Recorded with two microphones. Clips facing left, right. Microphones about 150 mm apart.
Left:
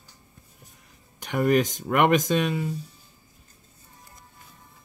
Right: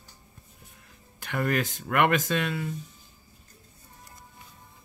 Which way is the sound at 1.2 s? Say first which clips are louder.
Left 6 dB; 20° left (ahead or behind).